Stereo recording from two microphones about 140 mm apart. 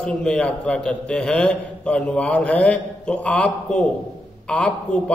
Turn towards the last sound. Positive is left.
turn(degrees=5)  # may be behind; listen again after turning